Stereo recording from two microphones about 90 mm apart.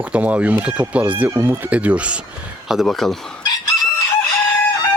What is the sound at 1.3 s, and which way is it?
Speech, 25° right (ahead or behind).